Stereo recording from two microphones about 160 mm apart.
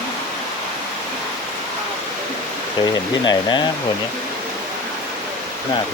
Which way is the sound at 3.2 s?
30° left (ahead or behind).